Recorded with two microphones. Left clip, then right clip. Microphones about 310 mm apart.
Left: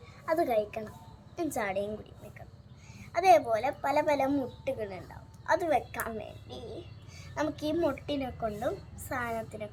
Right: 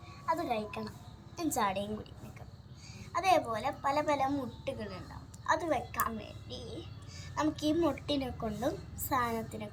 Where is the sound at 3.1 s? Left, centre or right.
Centre.